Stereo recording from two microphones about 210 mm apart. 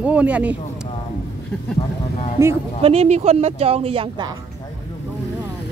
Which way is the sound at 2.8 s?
30° right (ahead or behind).